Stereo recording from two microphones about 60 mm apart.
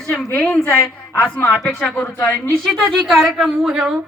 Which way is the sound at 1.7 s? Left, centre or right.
Centre.